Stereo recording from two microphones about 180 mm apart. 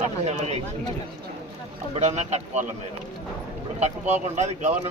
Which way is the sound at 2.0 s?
40° right (ahead or behind).